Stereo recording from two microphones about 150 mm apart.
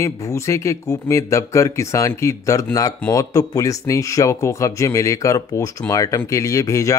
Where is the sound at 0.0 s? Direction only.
20° left (ahead or behind).